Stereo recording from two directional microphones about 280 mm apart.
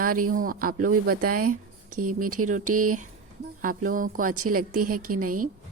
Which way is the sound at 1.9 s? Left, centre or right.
Right.